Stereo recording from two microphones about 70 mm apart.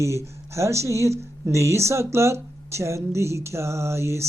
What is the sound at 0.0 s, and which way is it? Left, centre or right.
Speech, right.